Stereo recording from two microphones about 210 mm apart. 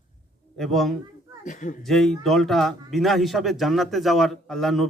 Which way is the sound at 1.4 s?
35° left (ahead or behind).